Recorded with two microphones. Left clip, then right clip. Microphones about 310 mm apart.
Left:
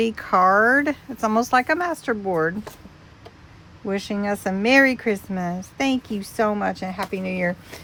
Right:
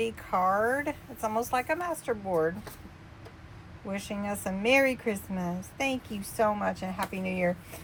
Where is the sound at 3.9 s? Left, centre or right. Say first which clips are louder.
Left 9 dB; left.